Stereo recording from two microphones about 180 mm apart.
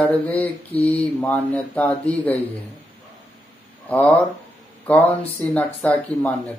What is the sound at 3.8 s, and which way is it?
Speech, 10° left (ahead or behind).